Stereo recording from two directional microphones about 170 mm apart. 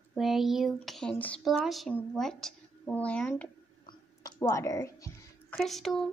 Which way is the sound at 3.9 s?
20° left (ahead or behind).